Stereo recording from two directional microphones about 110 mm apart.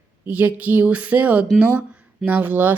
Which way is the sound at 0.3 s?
15° right (ahead or behind).